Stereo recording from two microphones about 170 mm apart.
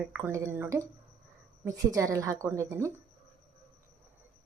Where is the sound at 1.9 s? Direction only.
20° right (ahead or behind).